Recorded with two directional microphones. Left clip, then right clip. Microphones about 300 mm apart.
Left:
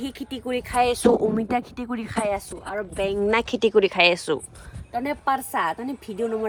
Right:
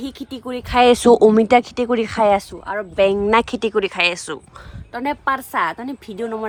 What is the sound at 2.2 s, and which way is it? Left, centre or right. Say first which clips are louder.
Speech: right 12 dB; right.